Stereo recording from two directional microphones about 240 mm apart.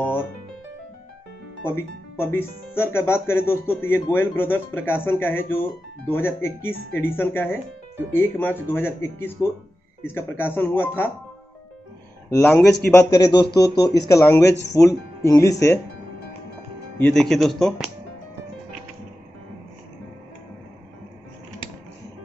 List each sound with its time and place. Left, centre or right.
1.6 s speech: centre
12.3 s speech: centre
13.1 s speech: centre
17.0 s speech: centre